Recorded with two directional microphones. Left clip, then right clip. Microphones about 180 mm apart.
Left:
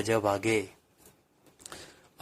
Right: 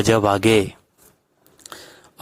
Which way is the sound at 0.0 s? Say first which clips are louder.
Right 11 dB; 40° right (ahead or behind).